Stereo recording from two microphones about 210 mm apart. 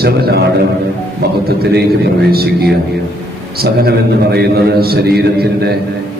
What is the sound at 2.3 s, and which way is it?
A man's voice, 50° right (ahead or behind).